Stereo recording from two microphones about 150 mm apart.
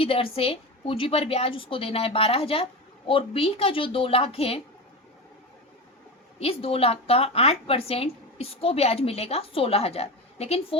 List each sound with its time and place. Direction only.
0.0 s a woman's voice: 40° left (ahead or behind)
6.4 s a woman's voice: 40° left (ahead or behind)